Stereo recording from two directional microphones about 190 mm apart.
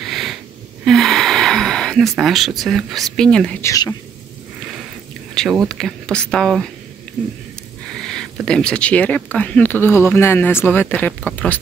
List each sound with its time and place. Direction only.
0.0 s wheeze: centre (ahead or behind)
0.8 s speech: centre (ahead or behind)
3.6 s speech: 20° left (ahead or behind)
5.3 s speech: centre (ahead or behind)
7.9 s speech: 5° left (ahead or behind)